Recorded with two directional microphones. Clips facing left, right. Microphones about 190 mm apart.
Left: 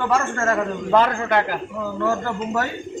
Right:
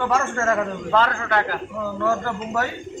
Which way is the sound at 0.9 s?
15° left (ahead or behind).